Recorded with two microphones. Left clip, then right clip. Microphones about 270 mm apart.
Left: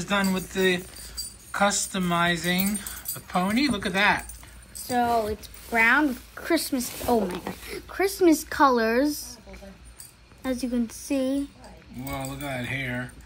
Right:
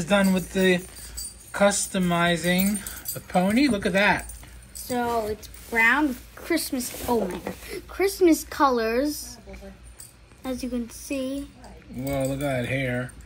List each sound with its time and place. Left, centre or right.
0.0 s speech: centre
4.8 s speech: left
10.7 s speech: left
12.1 s speech: centre